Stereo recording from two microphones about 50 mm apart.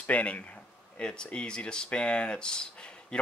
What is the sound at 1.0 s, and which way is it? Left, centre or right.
Speech, centre.